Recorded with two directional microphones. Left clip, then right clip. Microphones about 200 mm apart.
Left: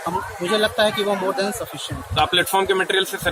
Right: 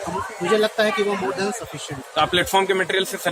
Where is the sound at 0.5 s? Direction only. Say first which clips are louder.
Even; 10° left (ahead or behind).